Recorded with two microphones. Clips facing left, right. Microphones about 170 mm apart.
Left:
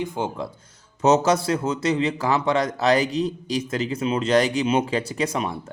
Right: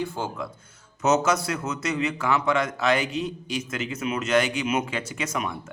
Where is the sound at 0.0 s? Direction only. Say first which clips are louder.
Left 3 dB; 20° left (ahead or behind).